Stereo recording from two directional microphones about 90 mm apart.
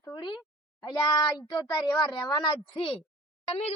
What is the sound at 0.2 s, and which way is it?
Speech, 60° left (ahead or behind).